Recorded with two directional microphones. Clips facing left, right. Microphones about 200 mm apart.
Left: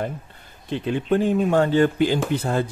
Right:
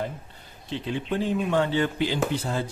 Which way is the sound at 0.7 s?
55° left (ahead or behind).